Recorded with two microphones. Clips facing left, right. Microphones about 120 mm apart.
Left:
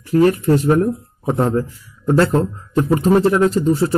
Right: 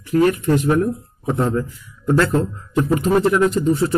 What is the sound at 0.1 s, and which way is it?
Speech, 35° left (ahead or behind).